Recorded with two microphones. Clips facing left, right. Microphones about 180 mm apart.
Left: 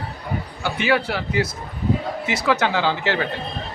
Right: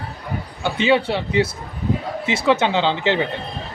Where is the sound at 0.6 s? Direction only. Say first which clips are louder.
Right 4 dB; 25° right (ahead or behind).